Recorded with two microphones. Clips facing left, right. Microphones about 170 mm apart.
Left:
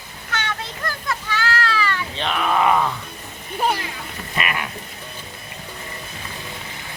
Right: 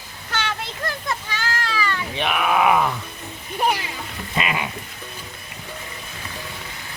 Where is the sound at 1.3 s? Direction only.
15° right (ahead or behind).